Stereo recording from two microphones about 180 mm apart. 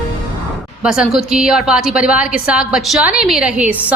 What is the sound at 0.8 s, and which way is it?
A woman's voice, 5° right (ahead or behind).